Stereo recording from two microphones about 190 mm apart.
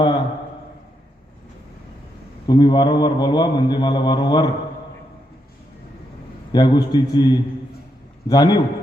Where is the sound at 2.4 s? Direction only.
25° left (ahead or behind).